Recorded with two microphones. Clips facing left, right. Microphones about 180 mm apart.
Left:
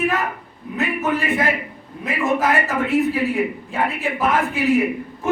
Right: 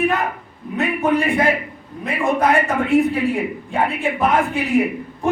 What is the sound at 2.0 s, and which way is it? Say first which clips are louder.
Speech: right 2 dB; centre (ahead or behind).